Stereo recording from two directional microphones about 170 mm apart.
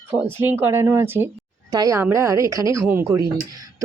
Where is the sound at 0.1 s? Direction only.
10° right (ahead or behind).